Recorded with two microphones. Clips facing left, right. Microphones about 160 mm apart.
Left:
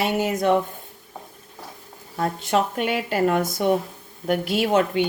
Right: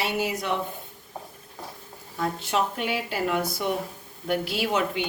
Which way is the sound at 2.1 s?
50° left (ahead or behind).